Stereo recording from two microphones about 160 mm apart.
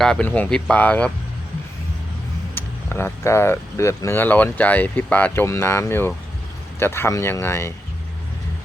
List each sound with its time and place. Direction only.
0.0 s speech: 5° left (ahead or behind)
2.6 s speech: 15° left (ahead or behind)